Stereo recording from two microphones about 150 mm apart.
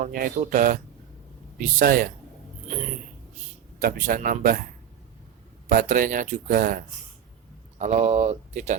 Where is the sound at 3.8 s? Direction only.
75° right (ahead or behind).